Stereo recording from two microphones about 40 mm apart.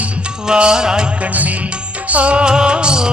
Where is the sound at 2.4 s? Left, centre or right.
Right.